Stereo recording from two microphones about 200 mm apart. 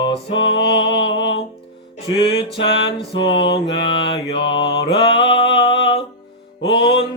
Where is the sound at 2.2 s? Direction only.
60° left (ahead or behind).